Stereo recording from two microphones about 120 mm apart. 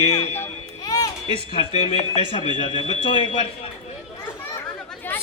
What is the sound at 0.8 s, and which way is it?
Music, 30° left (ahead or behind).